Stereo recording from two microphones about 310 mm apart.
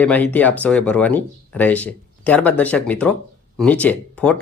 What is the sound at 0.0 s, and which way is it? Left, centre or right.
Speech, centre.